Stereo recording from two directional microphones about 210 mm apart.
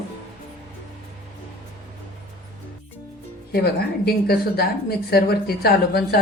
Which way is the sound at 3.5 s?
50° left (ahead or behind).